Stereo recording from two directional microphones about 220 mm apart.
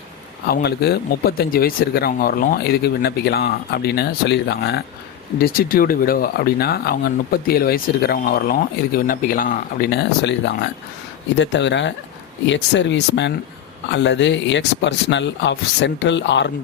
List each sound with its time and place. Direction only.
0.4 s speech: 45° left (ahead or behind)